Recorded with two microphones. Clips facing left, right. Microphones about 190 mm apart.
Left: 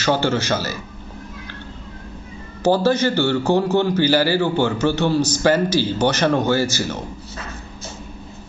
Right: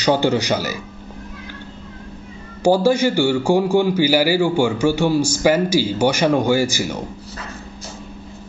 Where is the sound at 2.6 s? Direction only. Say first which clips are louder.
Right 2 dB; 10° right (ahead or behind).